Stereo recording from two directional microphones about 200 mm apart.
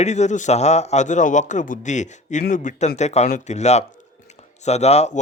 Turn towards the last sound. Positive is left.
turn(degrees=35)  # may be behind; listen again after turning